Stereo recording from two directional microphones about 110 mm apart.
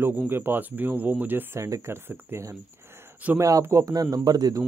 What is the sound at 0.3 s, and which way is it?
Speech, 20° right (ahead or behind).